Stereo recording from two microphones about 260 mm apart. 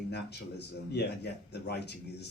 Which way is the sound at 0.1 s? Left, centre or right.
Left.